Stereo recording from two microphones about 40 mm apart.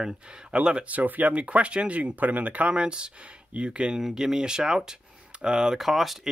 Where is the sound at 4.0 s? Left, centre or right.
Centre.